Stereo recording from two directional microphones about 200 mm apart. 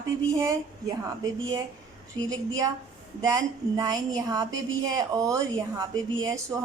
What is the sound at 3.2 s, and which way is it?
A woman's voice, 15° right (ahead or behind).